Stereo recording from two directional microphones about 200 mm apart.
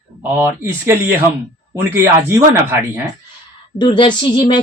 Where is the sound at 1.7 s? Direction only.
10° right (ahead or behind).